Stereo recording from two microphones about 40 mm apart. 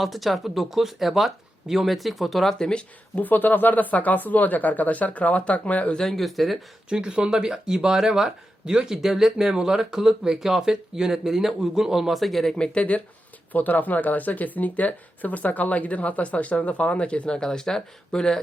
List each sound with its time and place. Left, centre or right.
0.0 s speech: centre
2.6 s speech: centre
3.2 s speech: left
6.0 s speech: centre
6.9 s speech: right; by 12.5 s centre
12.5 s speech: left
13.5 s speech: left; by 18.3 s centre